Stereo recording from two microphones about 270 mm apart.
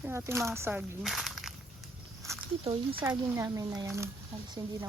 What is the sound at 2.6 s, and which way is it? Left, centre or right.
Speech, centre.